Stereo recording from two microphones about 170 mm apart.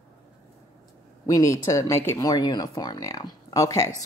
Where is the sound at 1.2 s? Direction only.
20° left (ahead or behind).